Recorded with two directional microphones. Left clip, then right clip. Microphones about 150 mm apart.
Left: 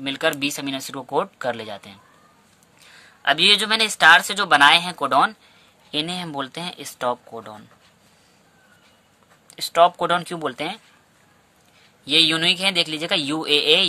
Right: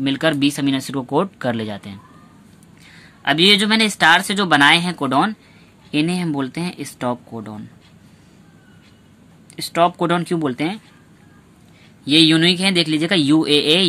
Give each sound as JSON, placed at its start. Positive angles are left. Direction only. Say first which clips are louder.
{"t": 0.0, "sound": "speech", "louder": "right 4 dB", "side_deg": 20}
{"t": 9.6, "sound": "speech", "louder": "left 1 dB", "side_deg": 25}
{"t": 12.0, "sound": "speech", "louder": "right 4 dB", "side_deg": 25}